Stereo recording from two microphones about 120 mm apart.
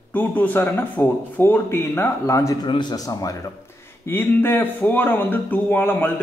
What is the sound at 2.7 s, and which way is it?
Speech, 40° left (ahead or behind).